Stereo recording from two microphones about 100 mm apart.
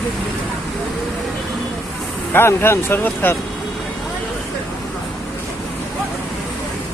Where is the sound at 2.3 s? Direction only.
25° left (ahead or behind).